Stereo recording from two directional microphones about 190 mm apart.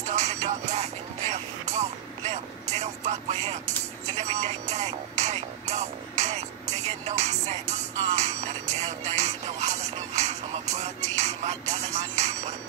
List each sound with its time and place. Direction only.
0.1 s music: 35° right (ahead or behind)
4.2 s a sound: 35° right (ahead or behind)
7.1 s music: 35° right (ahead or behind)